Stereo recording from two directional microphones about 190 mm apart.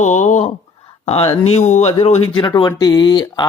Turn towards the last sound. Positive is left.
turn(degrees=20)  # may be behind; listen again after turning